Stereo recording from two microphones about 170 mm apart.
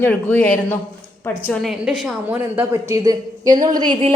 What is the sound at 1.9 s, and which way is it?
A woman's voice, 5° right (ahead or behind).